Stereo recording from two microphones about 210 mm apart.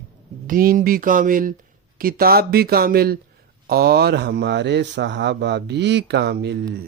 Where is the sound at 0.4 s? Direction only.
40° right (ahead or behind).